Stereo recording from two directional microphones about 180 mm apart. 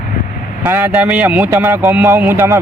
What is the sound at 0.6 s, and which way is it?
Speech, 10° right (ahead or behind).